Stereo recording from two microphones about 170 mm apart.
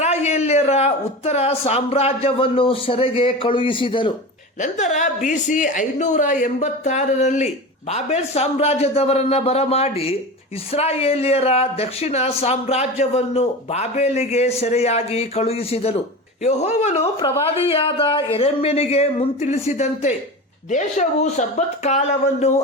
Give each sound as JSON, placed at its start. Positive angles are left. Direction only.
{"t": 0.0, "sound": "a man's voice", "side_deg": 40}
{"t": 4.6, "sound": "a woman's voice", "side_deg": 45}